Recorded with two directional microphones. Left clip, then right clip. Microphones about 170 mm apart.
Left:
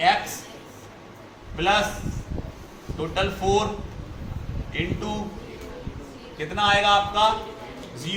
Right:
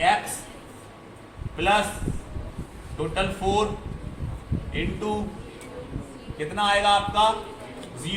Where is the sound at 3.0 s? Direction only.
20° right (ahead or behind).